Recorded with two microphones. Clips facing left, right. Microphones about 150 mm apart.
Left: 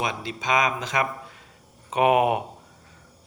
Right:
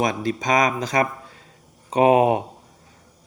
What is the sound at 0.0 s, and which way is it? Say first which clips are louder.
A man's voice: right 6 dB; 45° right (ahead or behind).